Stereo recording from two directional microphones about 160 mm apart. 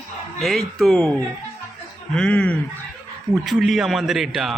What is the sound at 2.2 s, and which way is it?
A man's voice, 5° left (ahead or behind).